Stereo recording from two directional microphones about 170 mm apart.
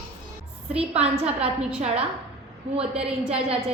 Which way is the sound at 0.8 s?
35° right (ahead or behind).